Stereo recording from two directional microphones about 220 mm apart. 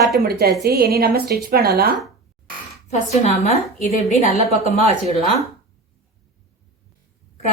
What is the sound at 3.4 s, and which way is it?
Speech, 35° left (ahead or behind).